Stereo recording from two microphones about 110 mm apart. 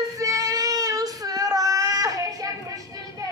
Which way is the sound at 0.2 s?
35° right (ahead or behind).